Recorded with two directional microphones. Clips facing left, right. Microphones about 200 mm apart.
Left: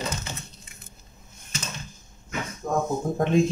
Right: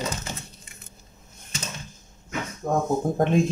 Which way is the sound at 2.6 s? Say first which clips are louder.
Right 2 dB; 35° right (ahead or behind).